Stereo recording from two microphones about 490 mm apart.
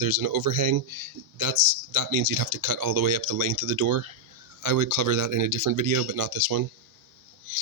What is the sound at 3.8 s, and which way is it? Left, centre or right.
Speech, right.